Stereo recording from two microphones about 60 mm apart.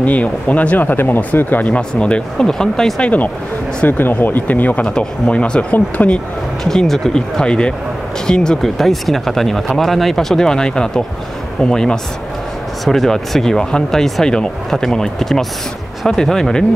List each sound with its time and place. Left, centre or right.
0.0 s speech: left
1.8 s speech: centre
3.0 s speech: left
4.8 s speech: centre
6.6 s speech: centre